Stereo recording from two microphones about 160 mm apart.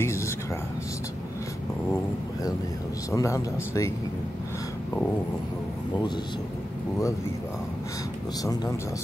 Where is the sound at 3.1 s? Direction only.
20° left (ahead or behind).